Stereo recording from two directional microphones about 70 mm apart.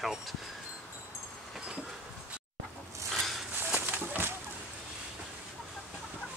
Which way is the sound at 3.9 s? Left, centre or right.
Right.